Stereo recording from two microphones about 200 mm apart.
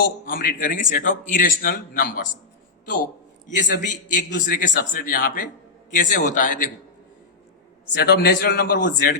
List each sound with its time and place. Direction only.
0.3 s a man's voice: 45° left (ahead or behind)
3.4 s a man's voice: 40° left (ahead or behind)
7.9 s a man's voice: 50° left (ahead or behind)